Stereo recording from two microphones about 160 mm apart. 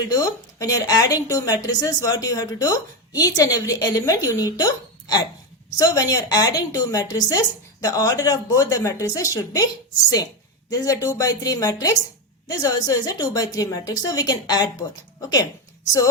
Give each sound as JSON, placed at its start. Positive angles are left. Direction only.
{"t": 0.1, "sound": "a woman's voice", "side_deg": 20}
{"t": 10.7, "sound": "a woman's voice", "side_deg": 20}